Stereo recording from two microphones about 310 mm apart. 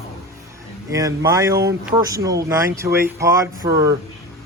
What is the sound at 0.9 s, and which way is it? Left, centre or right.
Speech, centre.